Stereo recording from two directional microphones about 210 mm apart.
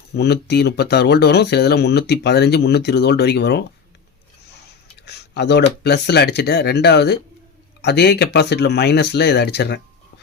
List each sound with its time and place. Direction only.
0.2 s speech: 50° left (ahead or behind)
5.0 s a sound: 50° left (ahead or behind)
5.8 s speech: 50° left (ahead or behind)